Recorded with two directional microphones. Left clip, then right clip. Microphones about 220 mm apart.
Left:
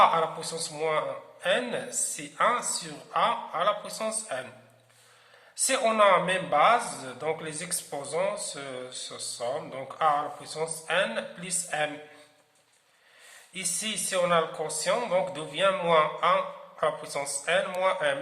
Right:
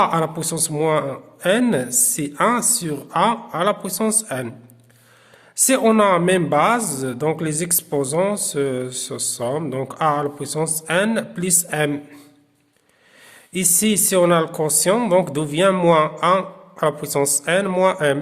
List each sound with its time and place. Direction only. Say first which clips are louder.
0.0 s speech: right 3 dB; 50° right (ahead or behind)
5.6 s speech: right 6 dB; 50° right (ahead or behind)
13.5 s speech: right 12 dB; 50° right (ahead or behind)